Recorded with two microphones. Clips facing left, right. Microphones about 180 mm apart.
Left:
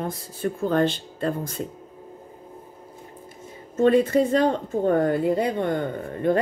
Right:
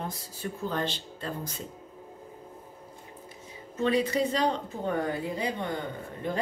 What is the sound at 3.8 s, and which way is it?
A woman's voice, 50° left (ahead or behind).